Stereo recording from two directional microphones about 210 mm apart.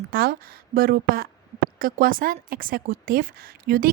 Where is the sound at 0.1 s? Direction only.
45° right (ahead or behind).